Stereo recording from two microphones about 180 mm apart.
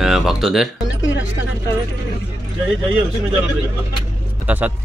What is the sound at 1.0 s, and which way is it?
Music, 90° left.